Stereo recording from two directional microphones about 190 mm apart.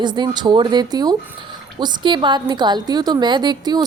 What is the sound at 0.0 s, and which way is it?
A woman's voice, 25° right (ahead or behind).